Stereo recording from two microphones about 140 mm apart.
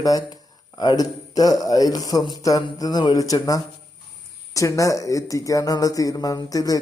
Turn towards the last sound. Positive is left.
turn(degrees=25)  # may be behind; listen again after turning